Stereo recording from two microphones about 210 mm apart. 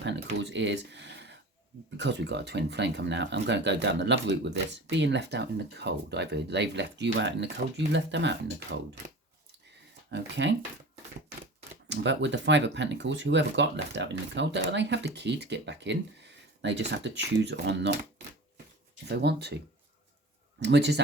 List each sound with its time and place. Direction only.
0.0 s speech: 55° right (ahead or behind)
10.1 s speech: 55° right (ahead or behind)
11.9 s speech: 55° right (ahead or behind)
19.0 s speech: 50° right (ahead or behind)
20.6 s speech: 55° right (ahead or behind)